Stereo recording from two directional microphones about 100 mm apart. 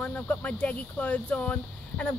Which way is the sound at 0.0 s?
15° left (ahead or behind).